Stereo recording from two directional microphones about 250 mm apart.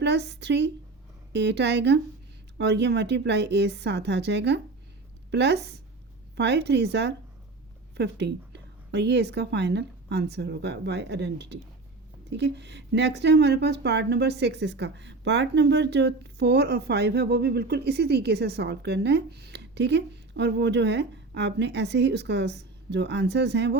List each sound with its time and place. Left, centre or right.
0.0 s speech: right